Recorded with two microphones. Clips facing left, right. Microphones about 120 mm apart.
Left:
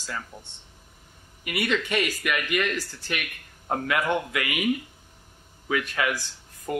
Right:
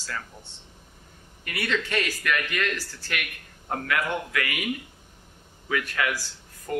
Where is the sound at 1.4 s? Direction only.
15° left (ahead or behind).